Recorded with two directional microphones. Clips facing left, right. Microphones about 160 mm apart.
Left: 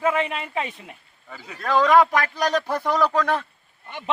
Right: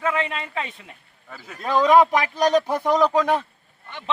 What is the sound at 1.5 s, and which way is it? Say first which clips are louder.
A man's voice: right 1 dB; 15° right (ahead or behind).